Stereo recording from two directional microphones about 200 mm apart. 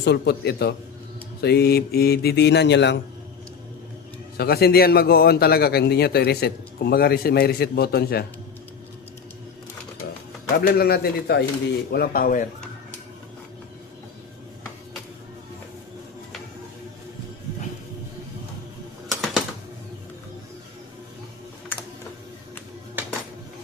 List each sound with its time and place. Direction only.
0.0 s speech: 55° left (ahead or behind)
4.4 s a man's voice: 50° left (ahead or behind)
10.5 s a man's voice: 50° left (ahead or behind)
19.0 s typewriter: centre (ahead or behind)